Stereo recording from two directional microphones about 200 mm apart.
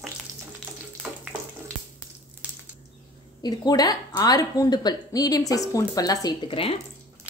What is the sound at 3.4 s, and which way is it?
A woman's voice, 20° left (ahead or behind).